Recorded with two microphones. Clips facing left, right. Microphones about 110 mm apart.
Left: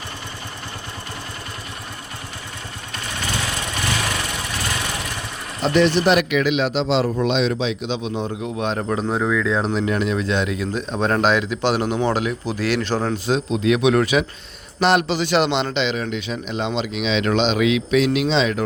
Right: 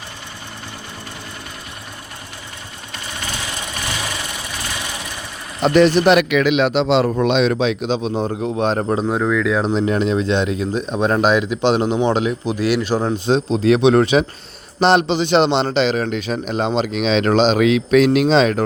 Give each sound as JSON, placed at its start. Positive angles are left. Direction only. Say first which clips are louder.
{"t": 5.6, "sound": "speech", "louder": "right 4 dB", "side_deg": -45}
{"t": 6.1, "sound": "a man's voice", "louder": "right 4 dB", "side_deg": -70}
{"t": 9.0, "sound": "speech", "louder": "even", "side_deg": -5}
{"t": 9.7, "sound": "a man's voice", "louder": "right 4 dB", "side_deg": -25}
{"t": 13.1, "sound": "a man's voice", "louder": "right 4 dB", "side_deg": -30}